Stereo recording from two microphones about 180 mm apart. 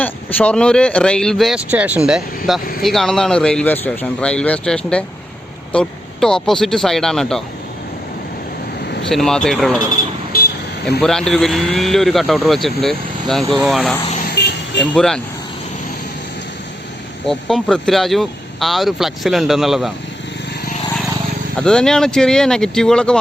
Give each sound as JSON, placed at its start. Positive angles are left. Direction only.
{"t": 0.0, "sound": "speech", "side_deg": 5}
{"t": 9.0, "sound": "speech", "side_deg": 5}
{"t": 11.0, "sound": "speech", "side_deg": 5}
{"t": 14.3, "sound": "music", "side_deg": 70}
{"t": 14.9, "sound": "speech", "side_deg": 5}
{"t": 17.2, "sound": "speech", "side_deg": 0}
{"t": 21.5, "sound": "speech", "side_deg": 5}